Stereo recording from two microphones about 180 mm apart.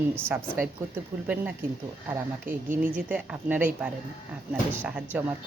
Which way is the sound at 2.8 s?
10° right (ahead or behind).